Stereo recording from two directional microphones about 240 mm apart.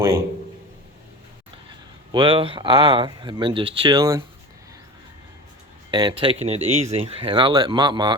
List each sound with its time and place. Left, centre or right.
2.1 s speech: right
5.9 s speech: centre